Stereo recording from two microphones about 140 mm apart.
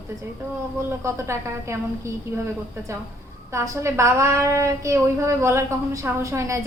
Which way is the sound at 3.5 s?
20° right (ahead or behind).